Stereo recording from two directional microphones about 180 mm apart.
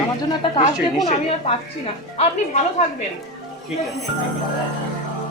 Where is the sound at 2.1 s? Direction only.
40° left (ahead or behind).